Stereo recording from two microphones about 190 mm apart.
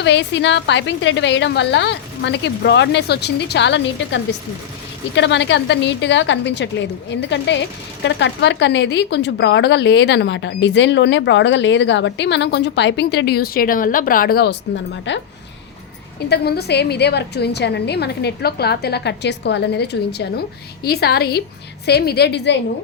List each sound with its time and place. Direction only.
0.0 s speech: 70° left (ahead or behind)
15.1 s speech: 70° left (ahead or behind)
16.3 s a woman's voice: 60° left (ahead or behind)